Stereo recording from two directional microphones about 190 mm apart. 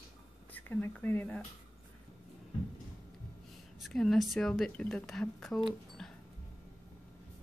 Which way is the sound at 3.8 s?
Centre (ahead or behind).